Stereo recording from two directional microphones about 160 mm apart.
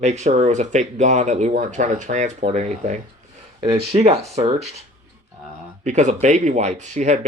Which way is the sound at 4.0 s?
40° right (ahead or behind).